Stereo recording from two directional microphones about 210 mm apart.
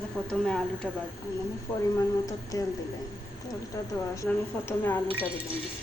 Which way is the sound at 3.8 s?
15° left (ahead or behind).